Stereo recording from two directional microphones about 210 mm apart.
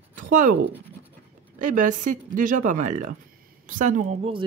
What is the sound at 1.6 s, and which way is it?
Speech, 40° right (ahead or behind).